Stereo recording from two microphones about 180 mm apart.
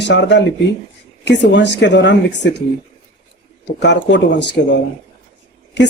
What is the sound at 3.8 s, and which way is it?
Speech, 75° left (ahead or behind).